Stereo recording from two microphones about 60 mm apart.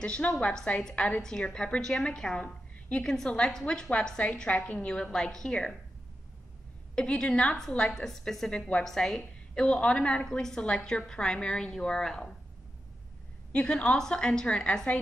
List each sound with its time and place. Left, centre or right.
0.0 s a woman's voice: centre
1.2 s a woman's voice: centre
7.0 s a woman's voice: centre
8.8 s a woman's voice: centre
13.5 s a woman's voice: left